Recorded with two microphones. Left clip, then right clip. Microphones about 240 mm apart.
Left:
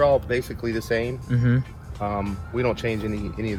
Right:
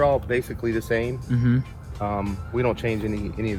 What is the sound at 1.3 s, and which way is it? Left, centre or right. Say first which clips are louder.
Speech: even; centre.